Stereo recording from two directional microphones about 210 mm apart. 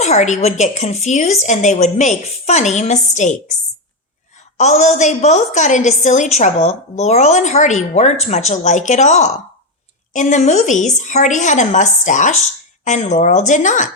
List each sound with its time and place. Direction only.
0.0 s a woman's voice: 35° left (ahead or behind)
4.5 s a woman's voice: 35° left (ahead or behind)